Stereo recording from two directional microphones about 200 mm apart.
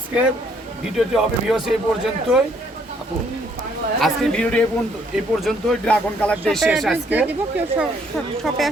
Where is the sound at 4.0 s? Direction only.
5° left (ahead or behind).